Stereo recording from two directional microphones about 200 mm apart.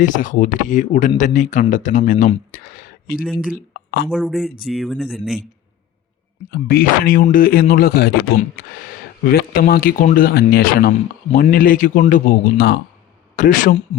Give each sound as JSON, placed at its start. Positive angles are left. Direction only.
{"t": 0.0, "sound": "speech", "side_deg": 40}
{"t": 4.1, "sound": "speech", "side_deg": 0}
{"t": 6.5, "sound": "speech", "side_deg": 45}
{"t": 13.3, "sound": "speech", "side_deg": 40}